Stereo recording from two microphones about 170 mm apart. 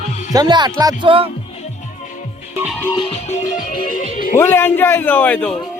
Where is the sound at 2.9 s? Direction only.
35° left (ahead or behind); by 4.4 s 50° left (ahead or behind).